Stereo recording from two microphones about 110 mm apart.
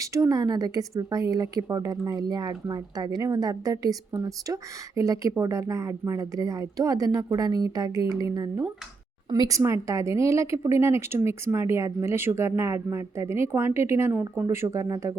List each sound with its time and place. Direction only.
0.0 s speech: 30° right (ahead or behind)
14.1 s speech: 15° right (ahead or behind)
14.5 s speech: 25° right (ahead or behind)